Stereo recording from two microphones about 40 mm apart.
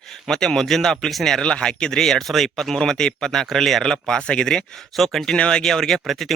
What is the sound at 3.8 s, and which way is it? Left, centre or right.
Speech, centre.